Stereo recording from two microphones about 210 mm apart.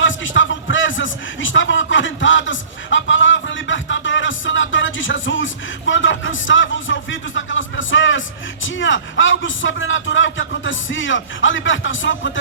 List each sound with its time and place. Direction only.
0.0 s a man's voice: 65° left (ahead or behind)